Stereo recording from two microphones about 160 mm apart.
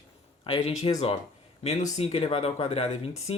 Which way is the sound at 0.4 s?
35° left (ahead or behind).